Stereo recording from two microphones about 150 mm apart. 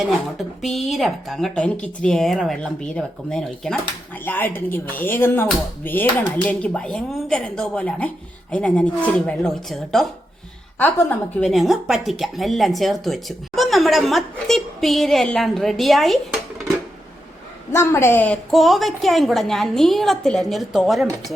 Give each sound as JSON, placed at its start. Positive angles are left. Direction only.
{"t": 0.9, "sound": "a woman's voice", "side_deg": 0}
{"t": 10.8, "sound": "speech", "side_deg": 10}
{"t": 11.5, "sound": "a woman's voice", "side_deg": 0}
{"t": 17.7, "sound": "speech", "side_deg": 20}
{"t": 18.5, "sound": "a woman's voice", "side_deg": 0}